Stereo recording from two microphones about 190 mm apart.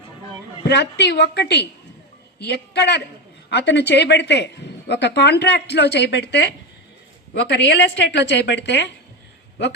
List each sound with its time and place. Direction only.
0.7 s a woman's voice: 65° left (ahead or behind)